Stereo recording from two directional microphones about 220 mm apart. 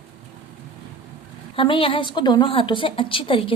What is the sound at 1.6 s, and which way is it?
A woman's voice, 25° left (ahead or behind).